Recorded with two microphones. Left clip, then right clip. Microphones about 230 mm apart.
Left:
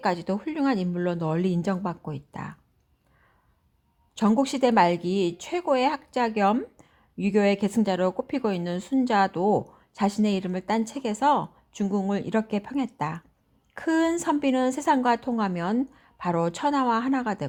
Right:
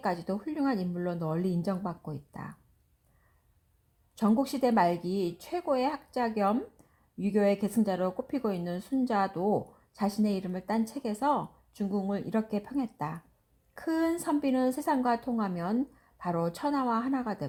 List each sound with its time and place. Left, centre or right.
0.0 s speech: left
4.1 s speech: left